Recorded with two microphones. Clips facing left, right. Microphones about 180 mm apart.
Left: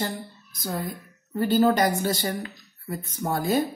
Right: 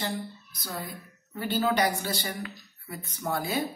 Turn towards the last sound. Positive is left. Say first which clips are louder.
# left 5 dB
turn(degrees=45)  # may be behind; listen again after turning